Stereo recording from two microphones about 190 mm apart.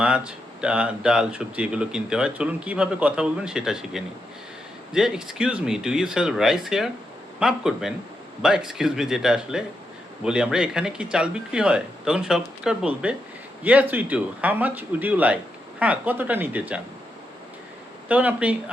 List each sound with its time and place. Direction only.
0.0 s speech: 5° right (ahead or behind)
18.1 s speech: 10° right (ahead or behind)